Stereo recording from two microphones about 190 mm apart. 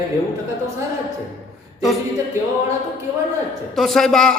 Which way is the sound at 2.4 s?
15° right (ahead or behind).